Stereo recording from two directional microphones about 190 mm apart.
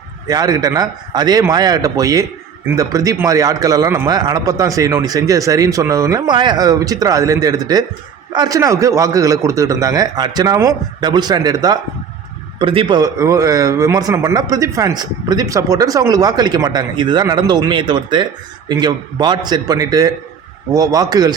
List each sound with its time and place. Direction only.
0.3 s speech: 20° right (ahead or behind)